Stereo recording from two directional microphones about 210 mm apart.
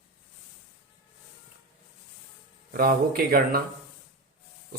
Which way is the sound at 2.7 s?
45° right (ahead or behind).